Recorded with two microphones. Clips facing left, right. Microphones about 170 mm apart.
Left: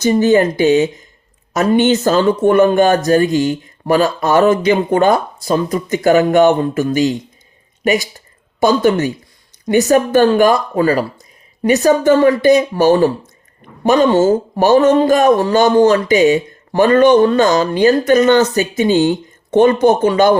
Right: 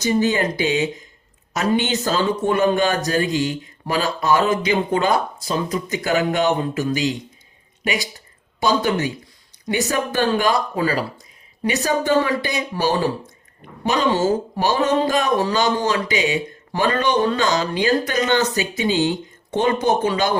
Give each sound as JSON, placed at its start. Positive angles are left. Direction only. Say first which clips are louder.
{"t": 0.0, "sound": "speech", "louder": "left 8 dB", "side_deg": 50}
{"t": 8.6, "sound": "speech", "louder": "left 7 dB", "side_deg": 50}